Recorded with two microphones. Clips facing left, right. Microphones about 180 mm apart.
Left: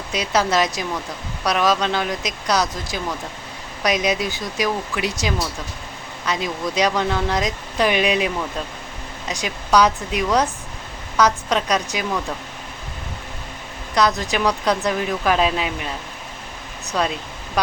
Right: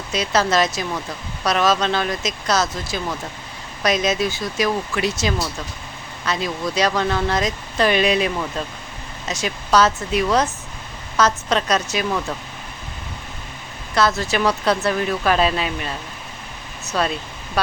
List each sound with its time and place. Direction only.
0.1 s speech: 15° left (ahead or behind)
13.9 s speech: 15° left (ahead or behind)